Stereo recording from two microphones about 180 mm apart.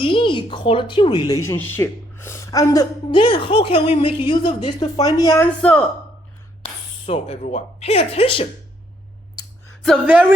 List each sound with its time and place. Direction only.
0.0 s speech: 30° left (ahead or behind)
6.6 s speech: 35° left (ahead or behind)
9.8 s a woman's voice: 5° right (ahead or behind)